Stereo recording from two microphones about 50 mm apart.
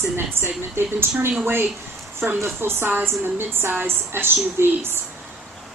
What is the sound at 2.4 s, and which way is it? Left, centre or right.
Speech, right.